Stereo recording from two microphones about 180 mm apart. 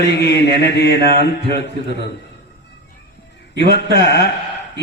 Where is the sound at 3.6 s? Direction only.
70° left (ahead or behind).